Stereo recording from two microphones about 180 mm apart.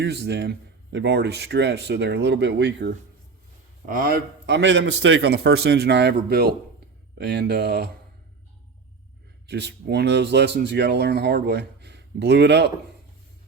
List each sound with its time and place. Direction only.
0.0 s a man's voice: 70° right (ahead or behind)
3.8 s a man's voice: 55° right (ahead or behind)
9.5 s a man's voice: 70° right (ahead or behind)